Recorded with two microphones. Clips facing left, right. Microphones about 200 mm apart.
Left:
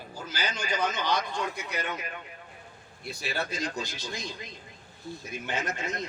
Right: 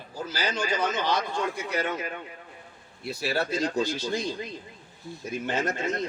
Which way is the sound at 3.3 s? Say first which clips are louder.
Right 5 dB; 30° right (ahead or behind).